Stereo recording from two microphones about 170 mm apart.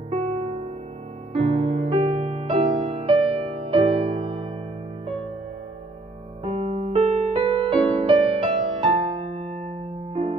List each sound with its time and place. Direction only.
1.3 s music: 35° right (ahead or behind)
6.4 s music: 35° right (ahead or behind)